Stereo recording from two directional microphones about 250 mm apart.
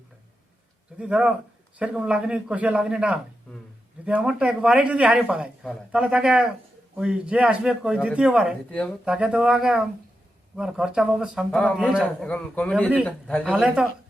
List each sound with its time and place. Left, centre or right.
0.9 s speech: centre
13.4 s speech: centre